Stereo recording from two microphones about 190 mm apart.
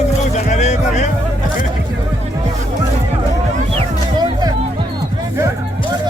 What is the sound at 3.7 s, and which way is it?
Music, 20° right (ahead or behind).